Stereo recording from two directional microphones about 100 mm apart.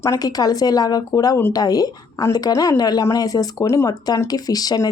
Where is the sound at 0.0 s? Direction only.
35° left (ahead or behind).